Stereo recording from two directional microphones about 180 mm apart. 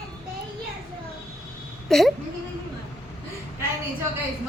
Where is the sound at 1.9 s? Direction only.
Centre (ahead or behind).